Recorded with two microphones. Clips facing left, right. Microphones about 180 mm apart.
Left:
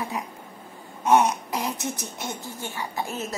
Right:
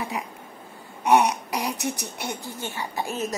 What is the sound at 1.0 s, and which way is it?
A woman's voice, 15° right (ahead or behind).